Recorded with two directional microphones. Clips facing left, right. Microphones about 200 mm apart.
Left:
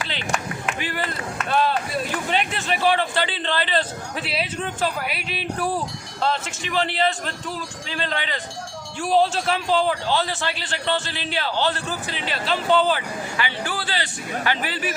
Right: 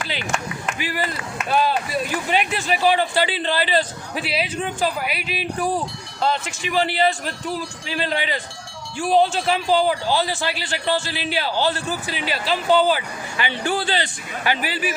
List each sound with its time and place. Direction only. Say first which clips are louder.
0.6 s a sound: right 1 dB; 5° right (ahead or behind)
1.5 s a man's voice: right 1 dB; 5° right (ahead or behind)
13.3 s speech: right 6 dB; 25° right (ahead or behind)
14.4 s a man's voice: right 3 dB; 10° right (ahead or behind)